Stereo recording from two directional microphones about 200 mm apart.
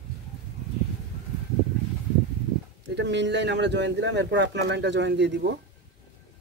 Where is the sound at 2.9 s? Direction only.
60° right (ahead or behind).